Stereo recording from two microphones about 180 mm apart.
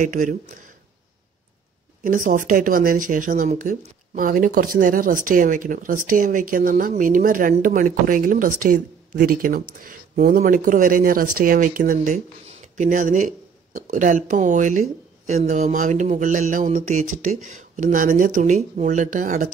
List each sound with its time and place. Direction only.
0.0 s speech: 45° right (ahead or behind)
2.0 s speech: 45° right (ahead or behind)